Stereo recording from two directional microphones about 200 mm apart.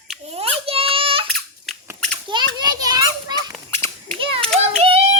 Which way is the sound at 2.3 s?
20° right (ahead or behind).